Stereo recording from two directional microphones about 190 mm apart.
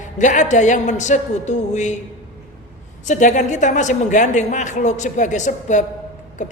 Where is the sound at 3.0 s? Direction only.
40° left (ahead or behind).